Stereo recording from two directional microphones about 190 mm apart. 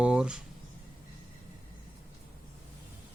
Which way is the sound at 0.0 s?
5° right (ahead or behind).